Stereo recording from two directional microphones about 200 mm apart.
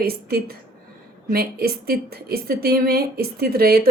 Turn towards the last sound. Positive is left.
turn(degrees=-50)  # may be behind; listen again after turning